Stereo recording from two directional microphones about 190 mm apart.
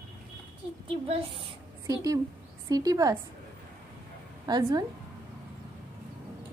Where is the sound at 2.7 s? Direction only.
20° right (ahead or behind).